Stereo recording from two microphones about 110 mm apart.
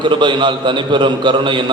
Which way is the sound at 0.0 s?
45° right (ahead or behind).